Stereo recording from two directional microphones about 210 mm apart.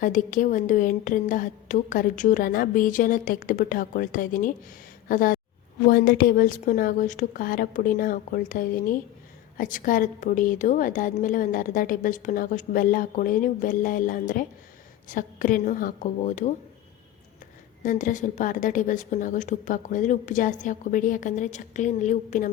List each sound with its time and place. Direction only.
0.0 s a woman's voice: 40° left (ahead or behind)
17.8 s a woman's voice: 35° left (ahead or behind)